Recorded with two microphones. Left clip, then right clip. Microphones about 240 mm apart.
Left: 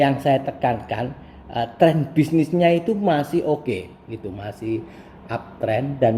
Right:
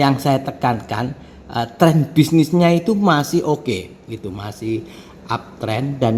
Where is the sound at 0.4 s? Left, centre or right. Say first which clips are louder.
Right 2 dB; right.